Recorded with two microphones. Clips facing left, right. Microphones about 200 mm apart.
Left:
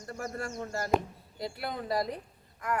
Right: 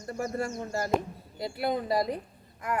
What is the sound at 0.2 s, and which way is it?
A woman's voice, 10° right (ahead or behind).